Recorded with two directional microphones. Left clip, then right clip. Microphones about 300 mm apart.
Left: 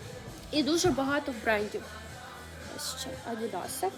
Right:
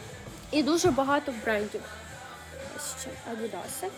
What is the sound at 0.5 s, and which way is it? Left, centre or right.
Speech, centre.